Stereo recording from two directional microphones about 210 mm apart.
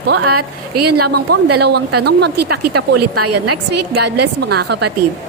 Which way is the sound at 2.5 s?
90° right.